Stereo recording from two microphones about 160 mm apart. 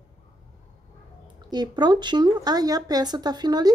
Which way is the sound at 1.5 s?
25° right (ahead or behind).